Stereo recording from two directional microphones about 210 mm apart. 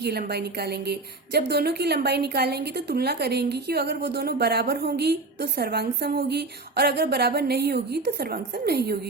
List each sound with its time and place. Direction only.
0.0 s a woman's voice: 50° right (ahead or behind)